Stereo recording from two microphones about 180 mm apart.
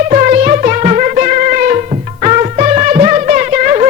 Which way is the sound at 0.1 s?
45° right (ahead or behind).